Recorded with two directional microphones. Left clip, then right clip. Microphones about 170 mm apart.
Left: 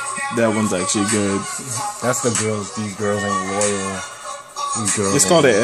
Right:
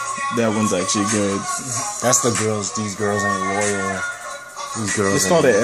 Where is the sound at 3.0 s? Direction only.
15° left (ahead or behind).